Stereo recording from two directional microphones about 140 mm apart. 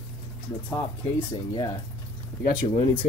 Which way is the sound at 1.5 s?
30° left (ahead or behind).